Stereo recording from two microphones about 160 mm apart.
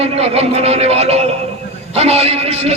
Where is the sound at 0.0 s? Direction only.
40° right (ahead or behind).